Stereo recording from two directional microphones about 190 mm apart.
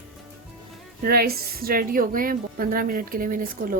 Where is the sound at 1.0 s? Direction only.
55° right (ahead or behind).